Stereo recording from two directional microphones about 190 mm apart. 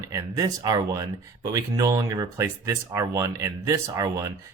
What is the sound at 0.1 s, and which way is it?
Speech, 20° right (ahead or behind).